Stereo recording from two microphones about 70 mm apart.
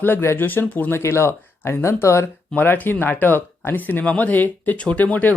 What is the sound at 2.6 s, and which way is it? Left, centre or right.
Speech, left.